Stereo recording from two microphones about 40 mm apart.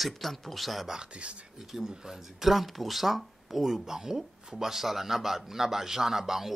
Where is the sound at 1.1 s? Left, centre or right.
Right.